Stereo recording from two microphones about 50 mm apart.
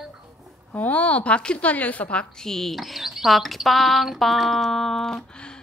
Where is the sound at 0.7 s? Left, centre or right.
Left.